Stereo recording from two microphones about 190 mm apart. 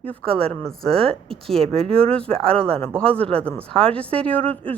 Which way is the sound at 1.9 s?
5° left (ahead or behind).